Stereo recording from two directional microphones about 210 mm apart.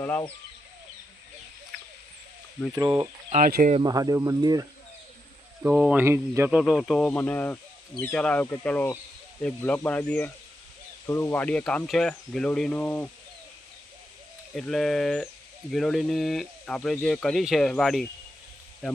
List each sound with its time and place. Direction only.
0.0 s speech: 10° left (ahead or behind)
3.2 s speech: 40° right (ahead or behind)
3.8 s speech: 20° right (ahead or behind)
5.6 s speech: 5° right (ahead or behind)
14.5 s speech: centre (ahead or behind)